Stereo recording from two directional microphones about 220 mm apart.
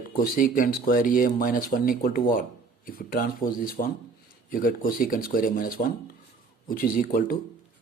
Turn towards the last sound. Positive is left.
turn(degrees=40)  # may be behind; listen again after turning